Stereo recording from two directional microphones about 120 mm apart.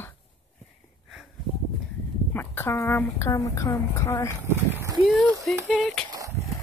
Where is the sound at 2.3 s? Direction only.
20° left (ahead or behind).